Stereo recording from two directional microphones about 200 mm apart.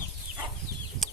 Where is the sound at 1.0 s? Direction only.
Centre (ahead or behind).